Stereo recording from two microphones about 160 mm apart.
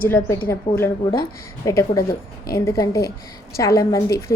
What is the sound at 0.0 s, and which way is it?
A woman's voice, 15° left (ahead or behind).